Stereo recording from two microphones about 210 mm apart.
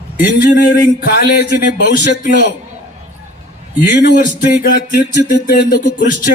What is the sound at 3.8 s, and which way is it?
A man's voice, 40° left (ahead or behind).